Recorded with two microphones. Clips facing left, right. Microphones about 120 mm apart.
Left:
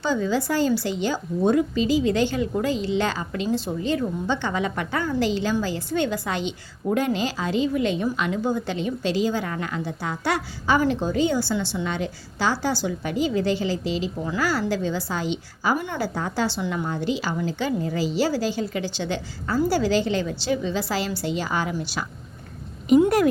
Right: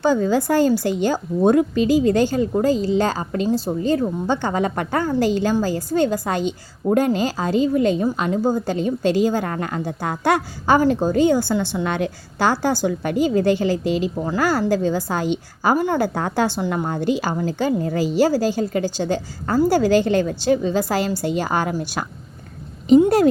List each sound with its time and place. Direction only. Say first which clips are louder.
0.0 s a woman's voice: right 5 dB; 50° right (ahead or behind)
16.1 s a woman's voice: right 5 dB; 55° right (ahead or behind)
22.9 s speech: right 4 dB; 30° right (ahead or behind)